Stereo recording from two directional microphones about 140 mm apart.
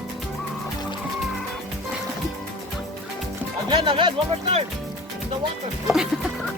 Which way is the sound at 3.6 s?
35° right (ahead or behind).